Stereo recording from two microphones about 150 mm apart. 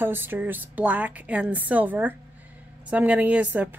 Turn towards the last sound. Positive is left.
turn(degrees=-10)  # may be behind; listen again after turning